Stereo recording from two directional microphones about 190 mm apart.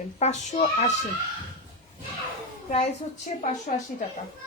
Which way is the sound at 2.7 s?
35° left (ahead or behind).